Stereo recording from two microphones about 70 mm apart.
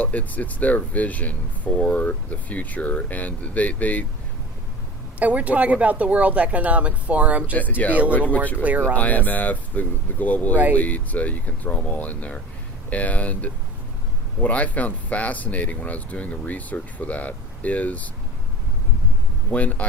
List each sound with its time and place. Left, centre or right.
0.0 s speech: left
5.2 s speech: right
7.8 s speech: centre
8.6 s speech: right
9.0 s speech: left
19.5 s speech: left